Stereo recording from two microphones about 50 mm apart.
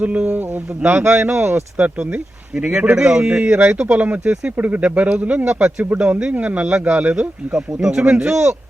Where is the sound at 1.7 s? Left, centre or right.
Right.